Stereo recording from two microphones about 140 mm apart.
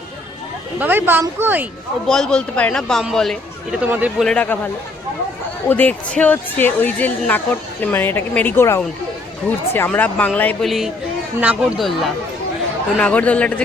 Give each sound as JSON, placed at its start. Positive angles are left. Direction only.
{"t": 0.8, "sound": "speech", "side_deg": -15}
{"t": 2.0, "sound": "a man's voice", "side_deg": 5}
{"t": 3.8, "sound": "speech", "side_deg": -10}
{"t": 4.2, "sound": "speech", "side_deg": 5}
{"t": 10.7, "sound": "a man's voice", "side_deg": 0}